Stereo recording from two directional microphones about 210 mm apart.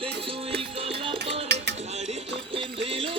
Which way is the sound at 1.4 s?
55° right (ahead or behind).